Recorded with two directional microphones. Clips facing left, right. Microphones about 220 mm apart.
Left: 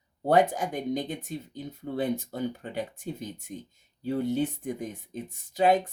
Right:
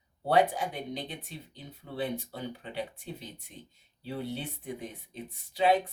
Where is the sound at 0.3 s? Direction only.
45° left (ahead or behind).